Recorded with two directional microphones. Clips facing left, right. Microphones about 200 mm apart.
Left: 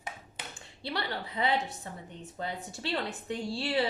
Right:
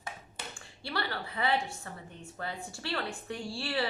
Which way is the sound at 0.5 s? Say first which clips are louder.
Left 1 dB; 20° left (ahead or behind).